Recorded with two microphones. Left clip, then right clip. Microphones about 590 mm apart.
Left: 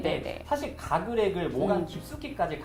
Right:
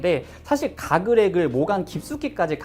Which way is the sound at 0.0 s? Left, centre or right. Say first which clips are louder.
Right 7 dB; right.